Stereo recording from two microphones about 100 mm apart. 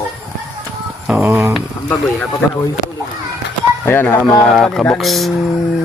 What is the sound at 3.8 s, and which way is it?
Speech, 20° left (ahead or behind).